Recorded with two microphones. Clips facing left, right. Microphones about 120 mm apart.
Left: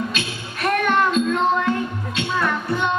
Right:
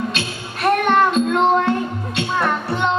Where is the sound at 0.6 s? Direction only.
30° right (ahead or behind).